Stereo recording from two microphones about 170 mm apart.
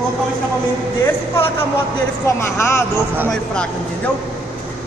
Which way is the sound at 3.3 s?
5° left (ahead or behind).